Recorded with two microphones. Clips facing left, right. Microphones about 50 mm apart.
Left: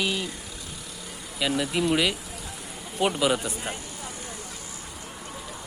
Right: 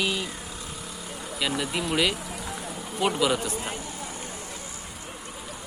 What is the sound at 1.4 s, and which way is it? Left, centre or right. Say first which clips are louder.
Speech: left 3 dB; centre.